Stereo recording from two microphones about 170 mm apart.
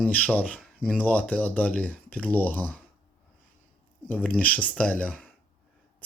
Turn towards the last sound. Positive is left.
turn(degrees=5)  # may be behind; listen again after turning